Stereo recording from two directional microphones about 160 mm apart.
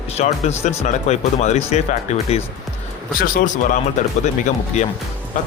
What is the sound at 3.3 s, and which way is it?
Speech, 55° left (ahead or behind).